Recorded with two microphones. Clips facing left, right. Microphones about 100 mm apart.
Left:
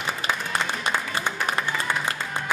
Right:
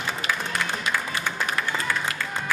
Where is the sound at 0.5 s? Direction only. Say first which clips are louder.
Left 1 dB; 25° left (ahead or behind).